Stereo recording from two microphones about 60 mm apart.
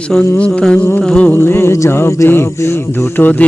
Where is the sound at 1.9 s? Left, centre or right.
Left.